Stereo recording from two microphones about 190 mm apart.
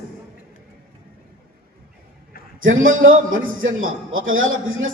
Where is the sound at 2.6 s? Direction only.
90° right.